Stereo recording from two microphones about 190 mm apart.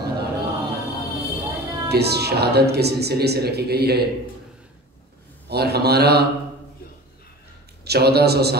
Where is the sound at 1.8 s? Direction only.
60° right (ahead or behind).